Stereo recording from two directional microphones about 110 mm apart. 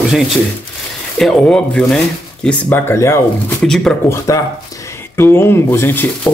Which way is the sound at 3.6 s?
5° left (ahead or behind).